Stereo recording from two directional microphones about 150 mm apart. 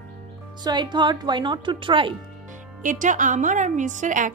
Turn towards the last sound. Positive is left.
turn(degrees=-55)  # may be behind; listen again after turning